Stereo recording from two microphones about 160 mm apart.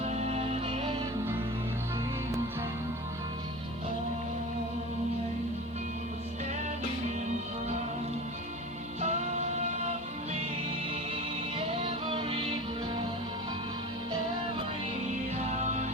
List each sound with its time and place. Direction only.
0.0 s music: 45° right (ahead or behind)
9.0 s music: 45° right (ahead or behind)
11.1 s music: 35° right (ahead or behind)
15.4 s music: 45° right (ahead or behind)